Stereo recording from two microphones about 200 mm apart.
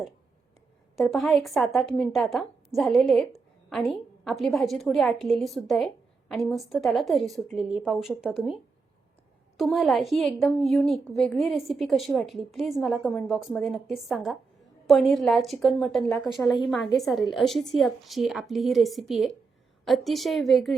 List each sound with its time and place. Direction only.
0.9 s a woman's voice: centre (ahead or behind)
9.6 s a woman's voice: centre (ahead or behind)